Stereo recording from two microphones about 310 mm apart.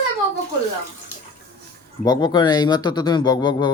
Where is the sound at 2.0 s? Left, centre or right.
Centre.